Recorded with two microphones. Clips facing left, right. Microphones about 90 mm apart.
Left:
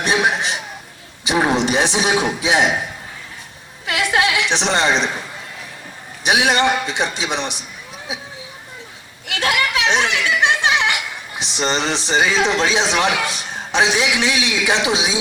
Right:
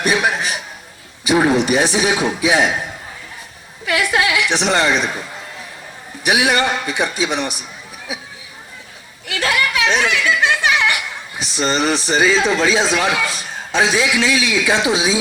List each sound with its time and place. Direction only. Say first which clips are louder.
0.0 s chuckle: even; 20° left (ahead or behind)
1.2 s a man's voice: right 3 dB; 20° left (ahead or behind)
3.8 s a sound: right 1 dB; 20° left (ahead or behind)
6.2 s a man's voice: even; 20° left (ahead or behind)
9.2 s speech: right 1 dB; 20° left (ahead or behind)